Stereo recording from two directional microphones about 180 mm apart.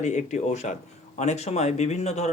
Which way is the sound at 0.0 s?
40° left (ahead or behind).